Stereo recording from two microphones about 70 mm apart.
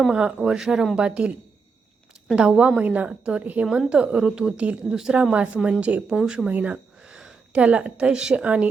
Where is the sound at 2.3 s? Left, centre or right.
Centre.